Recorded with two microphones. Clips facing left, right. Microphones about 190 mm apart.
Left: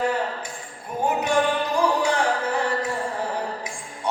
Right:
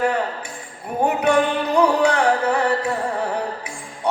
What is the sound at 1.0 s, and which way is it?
Music, 65° right (ahead or behind).